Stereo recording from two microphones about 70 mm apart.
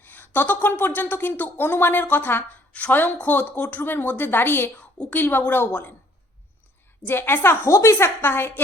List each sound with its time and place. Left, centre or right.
0.0 s a woman's voice: left
7.1 s a woman's voice: left